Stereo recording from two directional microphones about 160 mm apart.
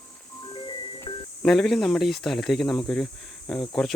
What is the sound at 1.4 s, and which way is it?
Speech, centre (ahead or behind).